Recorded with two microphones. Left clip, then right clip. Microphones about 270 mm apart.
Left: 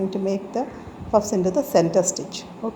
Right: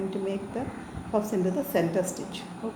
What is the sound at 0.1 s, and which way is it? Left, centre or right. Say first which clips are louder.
A woman's voice: left 6 dB; left.